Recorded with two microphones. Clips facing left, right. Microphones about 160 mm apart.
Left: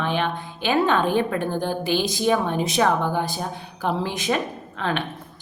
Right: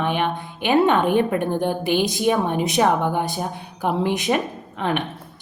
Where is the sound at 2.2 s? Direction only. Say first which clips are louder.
Left 1 dB; 15° right (ahead or behind).